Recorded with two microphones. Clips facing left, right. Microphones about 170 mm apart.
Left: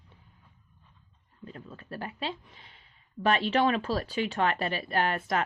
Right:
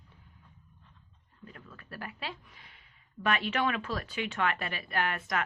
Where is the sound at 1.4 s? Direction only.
25° left (ahead or behind).